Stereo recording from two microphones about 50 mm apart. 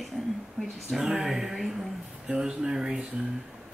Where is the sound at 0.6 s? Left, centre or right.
Centre.